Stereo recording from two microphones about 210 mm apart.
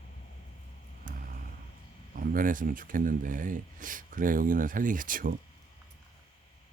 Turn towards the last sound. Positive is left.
turn(degrees=-40)  # may be behind; listen again after turning